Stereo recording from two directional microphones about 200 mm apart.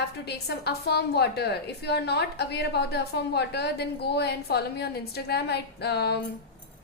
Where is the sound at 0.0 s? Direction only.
55° left (ahead or behind).